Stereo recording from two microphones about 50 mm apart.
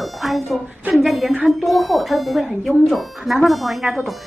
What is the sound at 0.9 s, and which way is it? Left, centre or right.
A woman's voice, centre.